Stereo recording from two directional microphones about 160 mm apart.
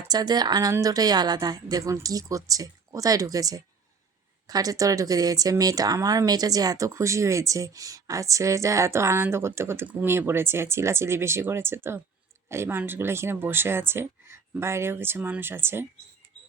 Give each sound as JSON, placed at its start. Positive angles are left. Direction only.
{"t": 0.0, "sound": "speech", "side_deg": -25}